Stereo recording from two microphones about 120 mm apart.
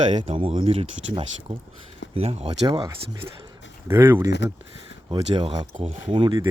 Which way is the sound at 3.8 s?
20° right (ahead or behind).